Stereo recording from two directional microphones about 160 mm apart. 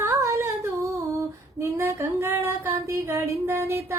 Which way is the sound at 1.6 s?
15° right (ahead or behind).